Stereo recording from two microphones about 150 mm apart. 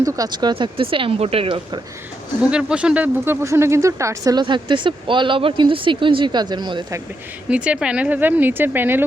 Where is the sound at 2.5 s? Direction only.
5° right (ahead or behind); by 6.9 s 30° right (ahead or behind).